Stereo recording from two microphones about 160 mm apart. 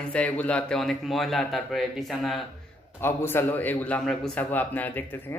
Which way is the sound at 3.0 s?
15° left (ahead or behind).